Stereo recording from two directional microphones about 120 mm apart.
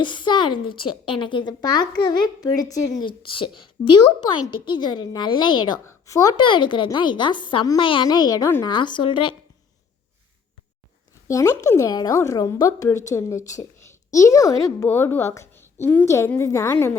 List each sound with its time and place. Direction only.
0.0 s a child's voice: 40° left (ahead or behind)
3.0 s a child's voice: 45° left (ahead or behind)
5.8 s a woman's voice: 25° left (ahead or behind)
6.3 s a child's voice: 40° left (ahead or behind)
11.3 s a woman's voice: 25° left (ahead or behind)